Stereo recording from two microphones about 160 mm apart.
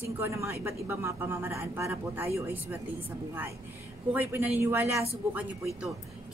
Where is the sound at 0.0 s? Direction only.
15° right (ahead or behind).